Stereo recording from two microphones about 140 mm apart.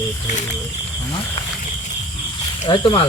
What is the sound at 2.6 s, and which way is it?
Speech, 35° left (ahead or behind).